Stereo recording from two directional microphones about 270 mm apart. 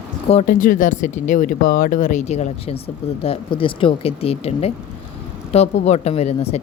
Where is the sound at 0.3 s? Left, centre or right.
Left.